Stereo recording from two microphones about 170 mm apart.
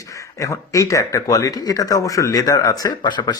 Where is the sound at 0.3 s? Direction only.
20° left (ahead or behind).